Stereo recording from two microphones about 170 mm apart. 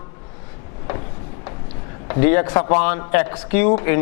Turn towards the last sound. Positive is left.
turn(degrees=15)  # may be behind; listen again after turning